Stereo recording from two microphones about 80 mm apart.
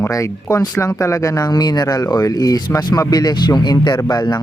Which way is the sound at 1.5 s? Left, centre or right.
Left.